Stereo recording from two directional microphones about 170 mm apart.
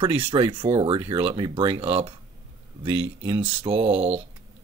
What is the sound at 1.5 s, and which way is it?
Speech, 30° right (ahead or behind).